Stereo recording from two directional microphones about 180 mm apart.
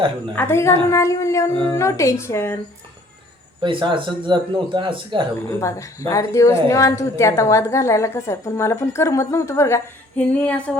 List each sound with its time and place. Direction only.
0.3 s a woman's voice: 15° left (ahead or behind)
3.6 s a man's voice: 25° right (ahead or behind)
5.5 s a woman's voice: 15° left (ahead or behind)